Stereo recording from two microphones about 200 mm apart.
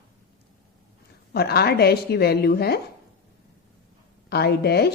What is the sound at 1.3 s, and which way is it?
Speech, 50° left (ahead or behind).